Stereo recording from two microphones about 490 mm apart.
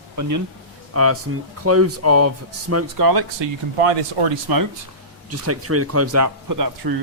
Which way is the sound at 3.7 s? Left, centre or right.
Right.